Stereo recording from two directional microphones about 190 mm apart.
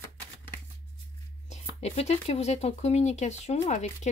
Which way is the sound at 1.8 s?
35° left (ahead or behind).